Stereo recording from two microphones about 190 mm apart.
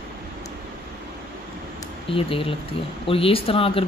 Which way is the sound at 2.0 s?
30° left (ahead or behind).